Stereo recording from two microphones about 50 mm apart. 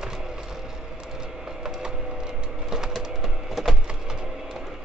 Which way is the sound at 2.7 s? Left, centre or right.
Centre.